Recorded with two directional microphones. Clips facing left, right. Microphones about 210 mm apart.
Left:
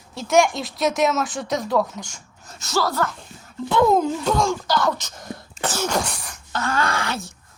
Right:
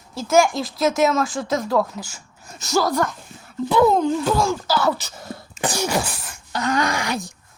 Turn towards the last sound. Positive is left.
turn(degrees=-15)  # may be behind; listen again after turning